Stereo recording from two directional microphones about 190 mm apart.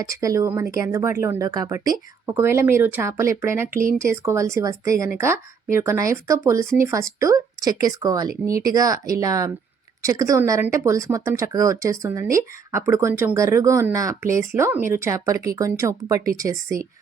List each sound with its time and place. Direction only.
0.1 s speech: 15° right (ahead or behind)